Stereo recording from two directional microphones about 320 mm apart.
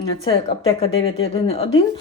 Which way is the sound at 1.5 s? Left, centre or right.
Centre.